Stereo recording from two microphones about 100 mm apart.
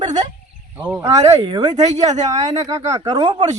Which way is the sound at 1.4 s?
50° right (ahead or behind).